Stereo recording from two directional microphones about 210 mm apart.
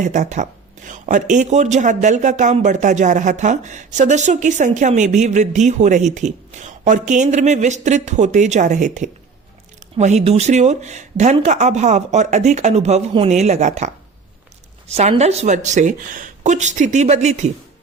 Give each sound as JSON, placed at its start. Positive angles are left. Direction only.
{"t": 0.0, "sound": "speech", "side_deg": -35}